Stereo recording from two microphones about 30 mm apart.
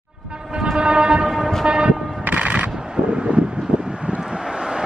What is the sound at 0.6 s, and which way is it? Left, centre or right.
Vehicle, right.